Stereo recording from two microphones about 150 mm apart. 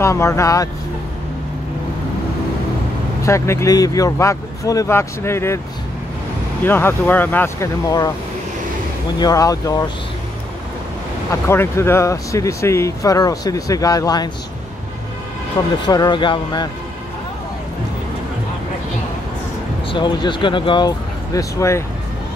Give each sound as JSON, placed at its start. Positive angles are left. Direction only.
{"t": 0.0, "sound": "speech", "side_deg": 20}
{"t": 3.3, "sound": "speech", "side_deg": 20}
{"t": 6.6, "sound": "speech", "side_deg": 15}
{"t": 9.2, "sound": "speech", "side_deg": 25}
{"t": 11.4, "sound": "speech", "side_deg": 15}
{"t": 15.8, "sound": "speech", "side_deg": 30}
{"t": 19.9, "sound": "speech", "side_deg": 30}